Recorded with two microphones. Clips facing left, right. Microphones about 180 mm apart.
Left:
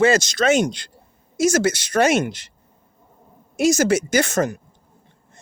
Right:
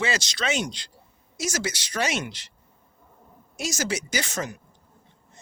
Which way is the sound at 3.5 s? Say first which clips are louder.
Left 12 dB; 55° left (ahead or behind).